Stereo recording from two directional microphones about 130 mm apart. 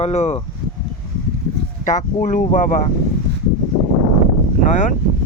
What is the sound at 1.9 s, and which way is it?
Speech, 75° left (ahead or behind).